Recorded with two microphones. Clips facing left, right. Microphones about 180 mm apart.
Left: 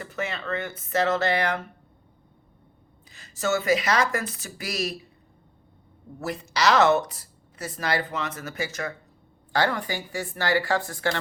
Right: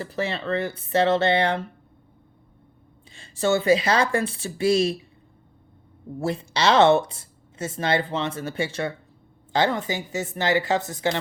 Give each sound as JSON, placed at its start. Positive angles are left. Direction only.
{"t": 0.0, "sound": "speech", "side_deg": -30}
{"t": 3.1, "sound": "speech", "side_deg": -30}
{"t": 6.1, "sound": "speech", "side_deg": -30}